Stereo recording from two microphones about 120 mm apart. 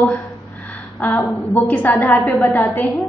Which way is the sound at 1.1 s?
15° left (ahead or behind).